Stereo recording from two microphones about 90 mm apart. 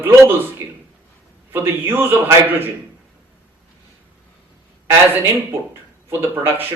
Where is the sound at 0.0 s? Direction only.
25° right (ahead or behind).